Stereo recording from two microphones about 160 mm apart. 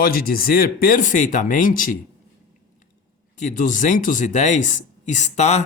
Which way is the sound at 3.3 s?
55° left (ahead or behind).